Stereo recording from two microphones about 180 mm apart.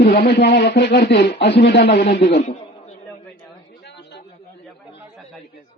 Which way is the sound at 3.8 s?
70° left (ahead or behind).